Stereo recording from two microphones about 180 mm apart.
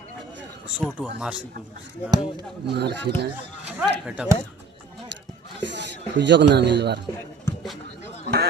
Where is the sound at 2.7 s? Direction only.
65° right (ahead or behind).